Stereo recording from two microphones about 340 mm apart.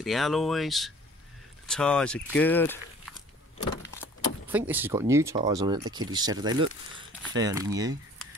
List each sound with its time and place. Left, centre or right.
0.0 s speech: centre
4.5 s speech: centre